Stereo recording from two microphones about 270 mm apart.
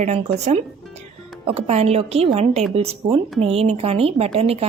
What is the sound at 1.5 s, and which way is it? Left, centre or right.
A woman's voice, right.